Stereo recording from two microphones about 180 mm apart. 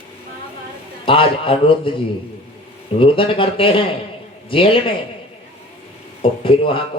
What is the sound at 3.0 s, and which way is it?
Speech, 30° left (ahead or behind).